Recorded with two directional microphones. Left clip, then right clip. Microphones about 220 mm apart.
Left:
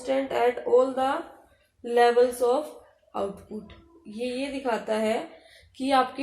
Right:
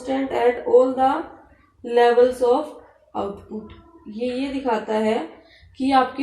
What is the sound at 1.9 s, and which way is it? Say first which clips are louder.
Speech: right 5 dB; 35° left (ahead or behind).